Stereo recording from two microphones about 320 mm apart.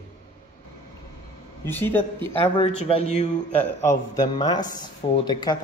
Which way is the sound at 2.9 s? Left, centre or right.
Centre.